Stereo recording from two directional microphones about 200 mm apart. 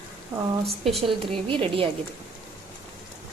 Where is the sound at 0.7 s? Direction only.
Centre (ahead or behind).